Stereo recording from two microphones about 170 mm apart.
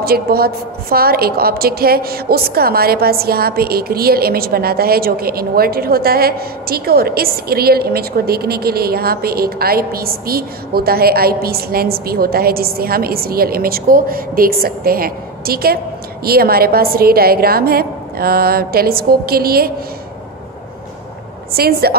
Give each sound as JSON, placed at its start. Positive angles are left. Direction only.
{"t": 0.0, "sound": "a woman's voice", "side_deg": -65}
{"t": 21.5, "sound": "a woman's voice", "side_deg": -65}